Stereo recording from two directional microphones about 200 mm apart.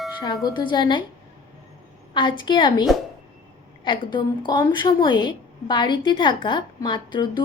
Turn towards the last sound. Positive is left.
turn(degrees=25)  # may be behind; listen again after turning